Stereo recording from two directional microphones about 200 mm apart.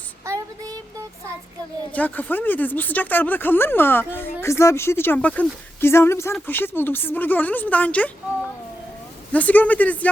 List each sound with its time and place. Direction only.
0.3 s a sound: 15° right (ahead or behind)
1.9 s speech: 10° left (ahead or behind)
9.3 s speech: 10° left (ahead or behind)